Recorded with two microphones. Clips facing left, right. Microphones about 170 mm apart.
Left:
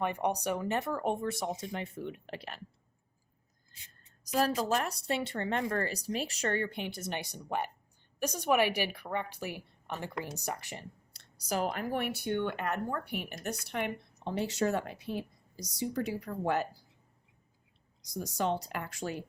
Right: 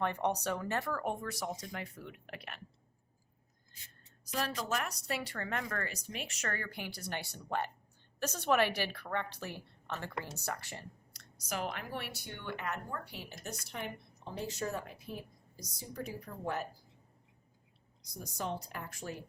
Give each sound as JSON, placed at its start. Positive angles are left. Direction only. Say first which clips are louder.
{"t": 0.0, "sound": "speech", "louder": "left 2 dB", "side_deg": 15}
{"t": 4.3, "sound": "a woman's voice", "louder": "left 7 dB", "side_deg": 40}
{"t": 11.1, "sound": "speech", "louder": "left 6 dB", "side_deg": 30}
{"t": 18.0, "sound": "speech", "louder": "left 8 dB", "side_deg": 90}